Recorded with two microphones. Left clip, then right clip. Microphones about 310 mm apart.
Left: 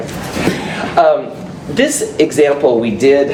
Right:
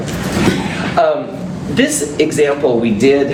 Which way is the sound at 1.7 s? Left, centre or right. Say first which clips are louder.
Left 2 dB; left.